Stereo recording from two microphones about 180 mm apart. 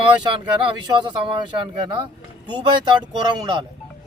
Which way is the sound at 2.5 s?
25° right (ahead or behind).